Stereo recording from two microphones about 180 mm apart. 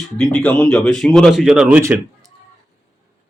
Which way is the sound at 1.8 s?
15° right (ahead or behind).